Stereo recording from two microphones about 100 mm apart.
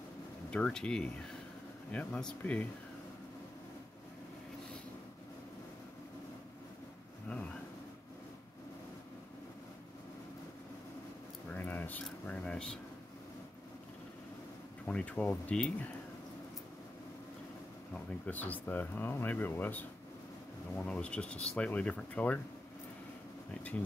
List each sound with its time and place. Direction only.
0.5 s speech: 10° left (ahead or behind)
11.5 s a sound: 20° left (ahead or behind)
14.9 s speech: 10° left (ahead or behind)
17.9 s speech: 15° left (ahead or behind)